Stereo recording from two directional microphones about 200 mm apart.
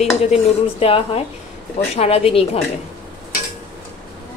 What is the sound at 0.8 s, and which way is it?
A woman's voice, 30° left (ahead or behind).